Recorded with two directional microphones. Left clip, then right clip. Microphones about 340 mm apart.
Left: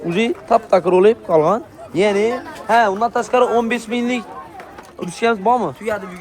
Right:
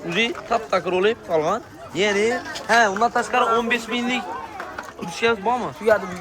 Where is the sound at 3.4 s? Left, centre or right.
Centre.